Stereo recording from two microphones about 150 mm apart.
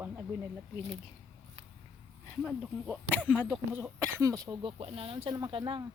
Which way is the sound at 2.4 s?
5° right (ahead or behind).